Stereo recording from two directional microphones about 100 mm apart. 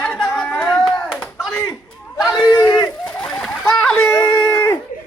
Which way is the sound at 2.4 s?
40° left (ahead or behind).